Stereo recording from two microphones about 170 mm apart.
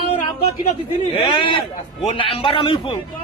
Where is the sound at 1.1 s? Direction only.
30° left (ahead or behind).